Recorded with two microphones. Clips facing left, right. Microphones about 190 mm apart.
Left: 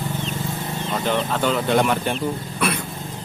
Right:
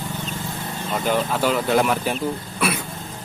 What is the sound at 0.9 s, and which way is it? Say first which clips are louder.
Speech: right 1 dB; 5° right (ahead or behind).